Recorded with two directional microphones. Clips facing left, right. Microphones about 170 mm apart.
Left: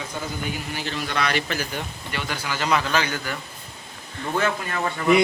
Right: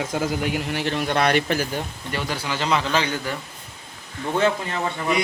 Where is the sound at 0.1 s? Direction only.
75° right (ahead or behind); by 3.3 s 25° right (ahead or behind).